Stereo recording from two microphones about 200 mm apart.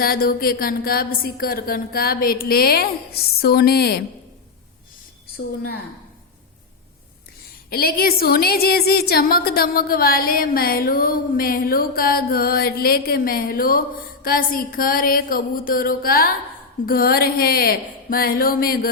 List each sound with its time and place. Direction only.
0.0 s a woman's voice: 50° left (ahead or behind)
7.7 s a woman's voice: 50° left (ahead or behind)